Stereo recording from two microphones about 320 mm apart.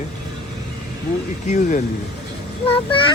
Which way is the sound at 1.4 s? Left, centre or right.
Left.